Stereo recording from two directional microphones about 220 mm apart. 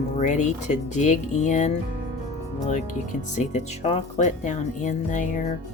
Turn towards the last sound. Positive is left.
turn(degrees=35)  # may be behind; listen again after turning